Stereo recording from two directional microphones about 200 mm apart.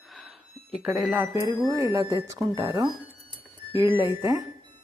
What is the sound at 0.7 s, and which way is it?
Speech, 5° right (ahead or behind).